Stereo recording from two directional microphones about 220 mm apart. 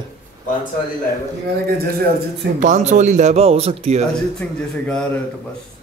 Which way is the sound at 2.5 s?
35° right (ahead or behind).